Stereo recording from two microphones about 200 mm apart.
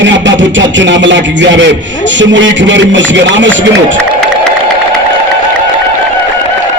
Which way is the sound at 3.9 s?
5° left (ahead or behind).